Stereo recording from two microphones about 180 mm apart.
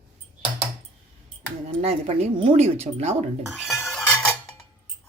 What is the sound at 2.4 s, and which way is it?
Speech, 35° right (ahead or behind).